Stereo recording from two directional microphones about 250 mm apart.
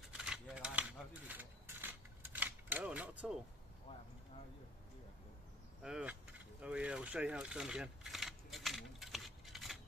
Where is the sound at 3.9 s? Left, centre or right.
Left.